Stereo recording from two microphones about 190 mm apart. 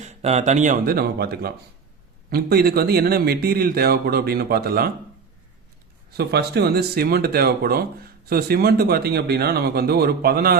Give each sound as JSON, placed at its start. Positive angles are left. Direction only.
{"t": 0.0, "sound": "speech", "side_deg": -35}
{"t": 6.1, "sound": "speech", "side_deg": -60}